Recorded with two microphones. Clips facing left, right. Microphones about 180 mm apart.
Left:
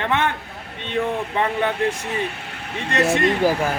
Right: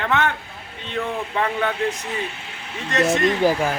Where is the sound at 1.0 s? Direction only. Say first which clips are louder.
Left 3 dB; 15° left (ahead or behind).